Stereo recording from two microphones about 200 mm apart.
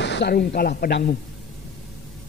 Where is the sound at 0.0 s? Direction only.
60° left (ahead or behind).